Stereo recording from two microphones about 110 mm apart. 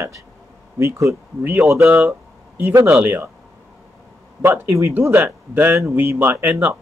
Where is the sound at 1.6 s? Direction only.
Centre (ahead or behind).